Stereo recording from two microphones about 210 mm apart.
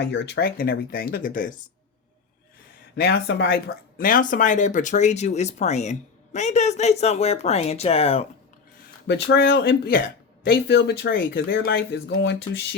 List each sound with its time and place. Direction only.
0.0 s speech: 55° left (ahead or behind)
2.9 s speech: 50° left (ahead or behind); by 8.3 s 30° left (ahead or behind)
9.0 s speech: 55° left (ahead or behind)